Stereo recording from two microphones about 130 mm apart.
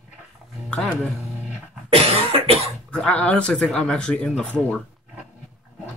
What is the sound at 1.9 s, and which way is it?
Cough, 50° right (ahead or behind).